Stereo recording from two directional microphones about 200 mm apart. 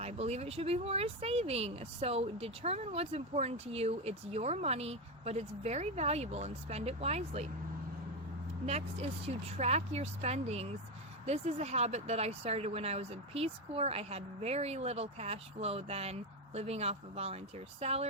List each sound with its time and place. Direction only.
0.0 s speech: 30° right (ahead or behind)
8.6 s speech: 30° right (ahead or behind)